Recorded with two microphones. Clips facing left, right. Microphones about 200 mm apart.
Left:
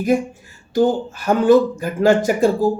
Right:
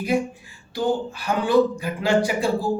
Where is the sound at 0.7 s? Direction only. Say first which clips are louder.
Left 6 dB; 45° left (ahead or behind).